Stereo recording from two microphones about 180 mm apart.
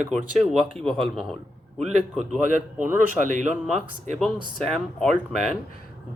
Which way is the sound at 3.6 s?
Centre (ahead or behind).